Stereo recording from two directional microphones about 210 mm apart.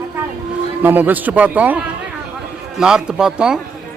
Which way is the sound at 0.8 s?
10° right (ahead or behind).